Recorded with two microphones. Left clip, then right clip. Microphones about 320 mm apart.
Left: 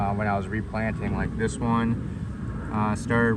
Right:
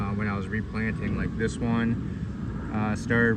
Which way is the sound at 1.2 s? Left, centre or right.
Centre.